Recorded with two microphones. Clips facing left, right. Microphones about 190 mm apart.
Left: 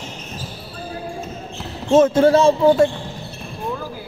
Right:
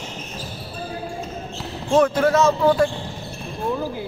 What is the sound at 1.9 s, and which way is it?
Speech, 25° left (ahead or behind).